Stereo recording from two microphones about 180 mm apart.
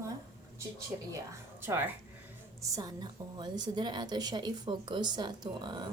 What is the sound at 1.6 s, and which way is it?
A woman's voice, 10° right (ahead or behind).